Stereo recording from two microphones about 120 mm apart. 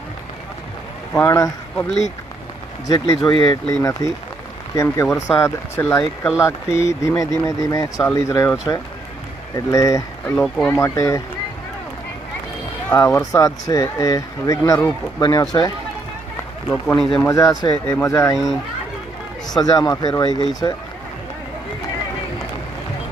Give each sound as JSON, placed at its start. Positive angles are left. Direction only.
{"t": 1.1, "sound": "a man's voice", "side_deg": 15}
{"t": 2.8, "sound": "speech", "side_deg": 30}
{"t": 10.3, "sound": "speech", "side_deg": 5}
{"t": 10.7, "sound": "speech", "side_deg": 25}
{"t": 12.9, "sound": "speech", "side_deg": 20}
{"t": 16.6, "sound": "a man's voice", "side_deg": 10}
{"t": 17.2, "sound": "speech", "side_deg": 30}
{"t": 18.3, "sound": "speech", "side_deg": 0}
{"t": 19.5, "sound": "speech", "side_deg": 35}